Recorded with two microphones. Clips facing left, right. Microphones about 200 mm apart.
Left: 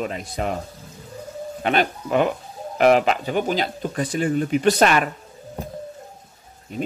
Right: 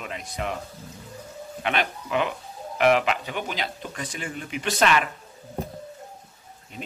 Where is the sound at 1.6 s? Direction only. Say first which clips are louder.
Left 6 dB; 40° left (ahead or behind).